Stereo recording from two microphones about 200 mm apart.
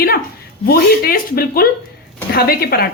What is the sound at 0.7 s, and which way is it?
A woman's voice, 45° left (ahead or behind).